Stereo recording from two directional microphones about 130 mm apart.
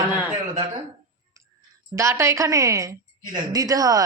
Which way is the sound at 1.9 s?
20° right (ahead or behind).